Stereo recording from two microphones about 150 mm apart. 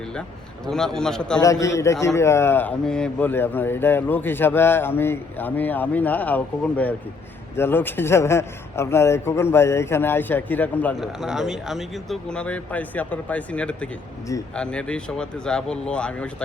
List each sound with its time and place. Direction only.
0.2 s a man's voice: 5° left (ahead or behind)
1.4 s a man's voice: 20° left (ahead or behind)
11.0 s a man's voice: 5° right (ahead or behind)